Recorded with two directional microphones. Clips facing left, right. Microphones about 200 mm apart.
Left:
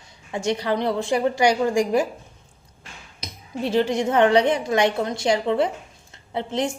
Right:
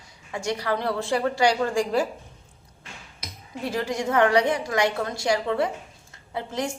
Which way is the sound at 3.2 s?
25° left (ahead or behind).